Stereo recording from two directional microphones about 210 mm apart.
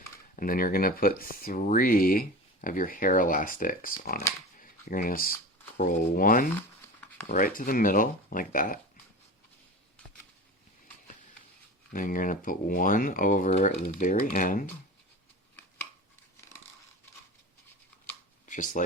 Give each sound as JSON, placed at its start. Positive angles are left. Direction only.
{"t": 0.3, "sound": "speech", "side_deg": 40}
{"t": 11.9, "sound": "speech", "side_deg": 40}
{"t": 18.4, "sound": "speech", "side_deg": 35}